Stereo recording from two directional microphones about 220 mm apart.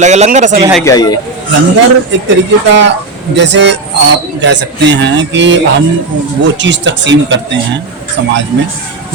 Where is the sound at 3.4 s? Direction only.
50° right (ahead or behind).